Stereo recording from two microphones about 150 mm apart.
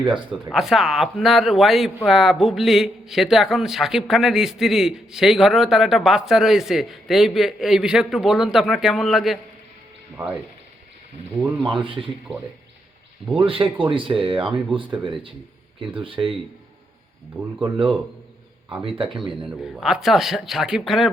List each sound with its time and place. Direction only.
0.0 s speech: 35° right (ahead or behind)
0.3 s a man's voice: centre (ahead or behind)
11.7 s speech: 35° right (ahead or behind)
13.3 s speech: 35° right (ahead or behind)
16.0 s speech: 35° right (ahead or behind)
17.4 s speech: 10° right (ahead or behind)
18.8 s speech: 35° right (ahead or behind)
19.5 s a man's voice: 5° right (ahead or behind)